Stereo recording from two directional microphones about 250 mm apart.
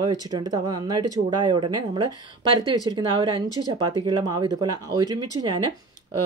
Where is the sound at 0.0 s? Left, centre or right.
Centre.